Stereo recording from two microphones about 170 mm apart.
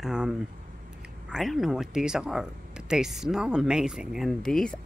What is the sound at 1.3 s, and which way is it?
Speech, centre (ahead or behind).